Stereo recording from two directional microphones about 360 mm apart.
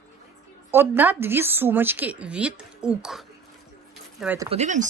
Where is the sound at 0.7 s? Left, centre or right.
Centre.